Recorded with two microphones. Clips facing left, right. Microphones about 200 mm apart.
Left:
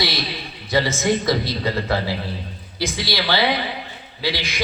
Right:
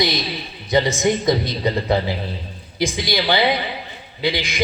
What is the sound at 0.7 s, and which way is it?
A man's voice, 20° right (ahead or behind).